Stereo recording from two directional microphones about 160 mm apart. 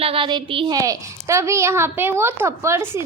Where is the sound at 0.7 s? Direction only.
20° right (ahead or behind).